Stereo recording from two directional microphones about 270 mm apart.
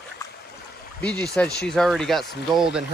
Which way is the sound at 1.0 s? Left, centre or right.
Centre.